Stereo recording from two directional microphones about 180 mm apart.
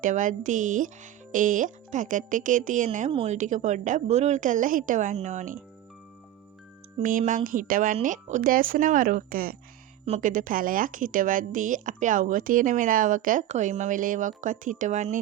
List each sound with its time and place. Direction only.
0.0 s a woman's voice: 45° right (ahead or behind)
3.1 s a woman's voice: 30° right (ahead or behind)
3.3 s a woman's voice: 45° right (ahead or behind)
7.0 s a woman's voice: 45° right (ahead or behind)